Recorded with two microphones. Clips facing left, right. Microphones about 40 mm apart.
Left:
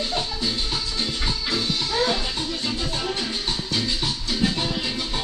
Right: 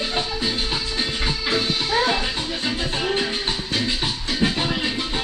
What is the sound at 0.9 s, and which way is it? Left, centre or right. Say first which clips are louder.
Music: right 2 dB; right.